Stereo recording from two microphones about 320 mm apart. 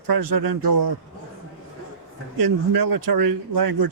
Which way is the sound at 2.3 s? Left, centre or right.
Right.